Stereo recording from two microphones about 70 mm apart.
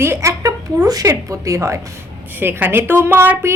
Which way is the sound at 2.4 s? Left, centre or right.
Right.